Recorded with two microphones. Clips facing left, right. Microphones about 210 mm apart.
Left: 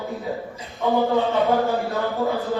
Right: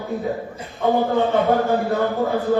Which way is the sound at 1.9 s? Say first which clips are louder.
Right 3 dB; 15° right (ahead or behind).